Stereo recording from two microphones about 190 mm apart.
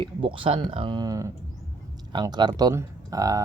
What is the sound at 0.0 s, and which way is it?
Speech, 25° right (ahead or behind).